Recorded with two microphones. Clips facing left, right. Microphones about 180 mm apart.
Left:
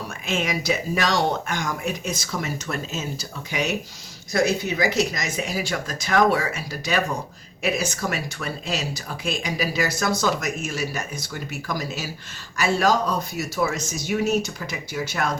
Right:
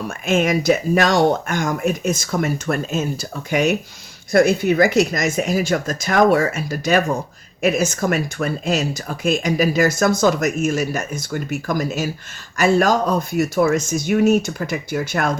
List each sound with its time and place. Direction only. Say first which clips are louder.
0.3 s speech: right 8 dB; 50° right (ahead or behind)